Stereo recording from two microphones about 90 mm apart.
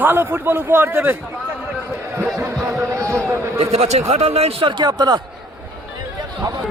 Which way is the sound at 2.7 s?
35° right (ahead or behind).